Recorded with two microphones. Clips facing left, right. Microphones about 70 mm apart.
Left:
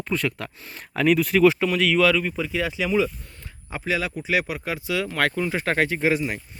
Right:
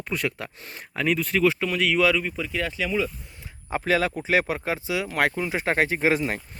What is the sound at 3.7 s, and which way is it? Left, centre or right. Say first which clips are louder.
Speech: right 3 dB; right.